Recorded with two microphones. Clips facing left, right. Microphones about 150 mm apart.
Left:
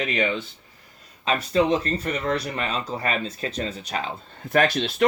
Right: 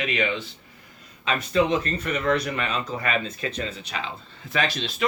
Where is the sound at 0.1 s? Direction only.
35° left (ahead or behind).